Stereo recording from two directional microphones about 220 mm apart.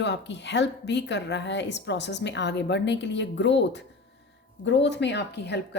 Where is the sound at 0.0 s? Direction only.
55° left (ahead or behind).